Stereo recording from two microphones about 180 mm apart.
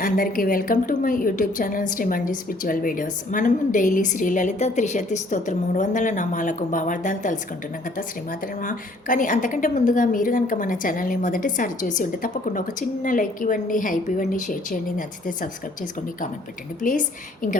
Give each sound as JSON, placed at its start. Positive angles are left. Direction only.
{"t": 0.0, "sound": "a woman's voice", "side_deg": 50}
{"t": 16.8, "sound": "a woman's voice", "side_deg": 45}